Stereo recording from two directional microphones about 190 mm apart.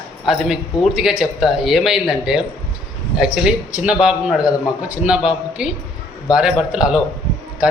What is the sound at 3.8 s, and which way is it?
A man's voice, 5° right (ahead or behind).